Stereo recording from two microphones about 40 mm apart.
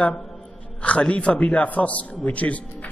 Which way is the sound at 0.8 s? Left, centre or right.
Left.